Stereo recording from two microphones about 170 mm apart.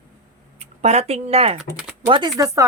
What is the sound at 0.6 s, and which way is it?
Speech, 40° right (ahead or behind).